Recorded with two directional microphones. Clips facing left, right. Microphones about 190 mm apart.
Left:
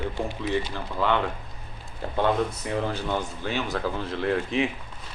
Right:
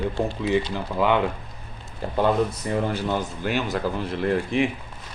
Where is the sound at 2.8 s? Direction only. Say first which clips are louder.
Right 3 dB; 10° right (ahead or behind).